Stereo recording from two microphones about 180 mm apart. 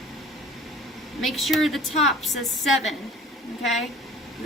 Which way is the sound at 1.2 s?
Centre (ahead or behind).